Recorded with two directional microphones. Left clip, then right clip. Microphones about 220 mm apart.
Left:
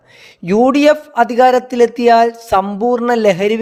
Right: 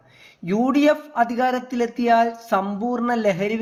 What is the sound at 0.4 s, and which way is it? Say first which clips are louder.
Speech: left 8 dB; 45° left (ahead or behind).